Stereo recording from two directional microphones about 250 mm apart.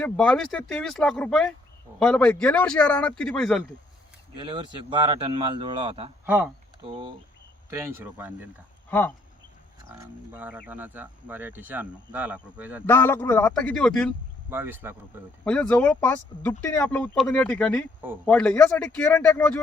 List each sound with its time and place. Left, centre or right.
0.0 s speech: centre
4.4 s a man's voice: centre
6.2 s speech: centre
6.8 s a man's voice: centre
8.9 s speech: centre
9.9 s speech: centre
12.8 s speech: centre
14.5 s speech: centre
15.4 s speech: centre